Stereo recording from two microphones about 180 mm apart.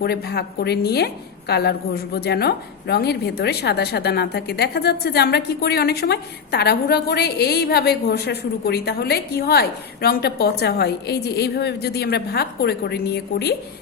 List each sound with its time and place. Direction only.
0.0 s a woman's voice: 65° left (ahead or behind)